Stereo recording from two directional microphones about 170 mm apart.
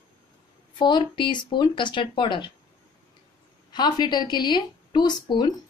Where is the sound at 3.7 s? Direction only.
25° left (ahead or behind).